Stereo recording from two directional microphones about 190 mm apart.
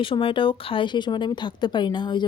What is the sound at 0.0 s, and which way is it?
Speech, 30° left (ahead or behind).